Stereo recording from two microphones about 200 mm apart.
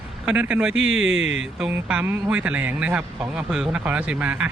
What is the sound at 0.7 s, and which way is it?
Speech, 80° right.